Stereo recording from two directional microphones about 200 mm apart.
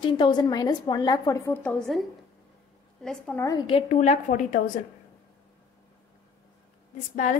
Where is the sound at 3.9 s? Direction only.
35° left (ahead or behind).